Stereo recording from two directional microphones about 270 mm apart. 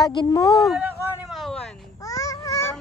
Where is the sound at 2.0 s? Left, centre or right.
Centre.